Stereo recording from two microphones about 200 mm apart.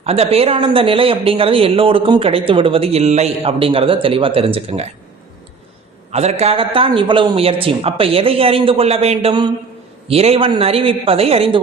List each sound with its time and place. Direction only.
0.0 s a man's voice: 30° right (ahead or behind)
6.1 s a man's voice: 30° right (ahead or behind)